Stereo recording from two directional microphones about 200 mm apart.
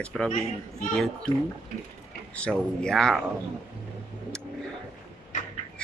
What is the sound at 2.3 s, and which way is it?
Speech, 5° left (ahead or behind).